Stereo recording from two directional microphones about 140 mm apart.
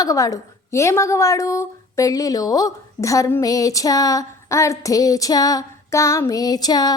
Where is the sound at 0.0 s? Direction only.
25° left (ahead or behind).